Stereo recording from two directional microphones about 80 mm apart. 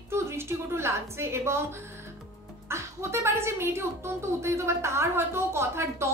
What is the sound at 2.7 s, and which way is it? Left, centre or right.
A woman's voice, right.